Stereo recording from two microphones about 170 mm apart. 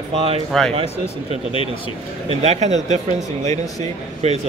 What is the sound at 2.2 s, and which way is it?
Speech, 40° right (ahead or behind).